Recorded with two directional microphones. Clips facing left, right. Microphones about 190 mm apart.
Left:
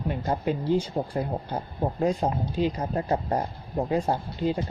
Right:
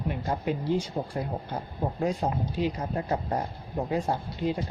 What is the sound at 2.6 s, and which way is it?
Speech, 35° left (ahead or behind).